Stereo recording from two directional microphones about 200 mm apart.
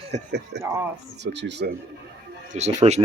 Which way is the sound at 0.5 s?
60° right (ahead or behind).